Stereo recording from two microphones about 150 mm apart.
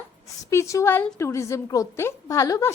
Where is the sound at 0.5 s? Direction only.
20° left (ahead or behind).